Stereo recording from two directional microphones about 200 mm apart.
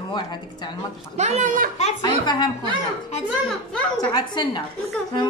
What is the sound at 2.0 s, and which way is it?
Speech, 20° left (ahead or behind).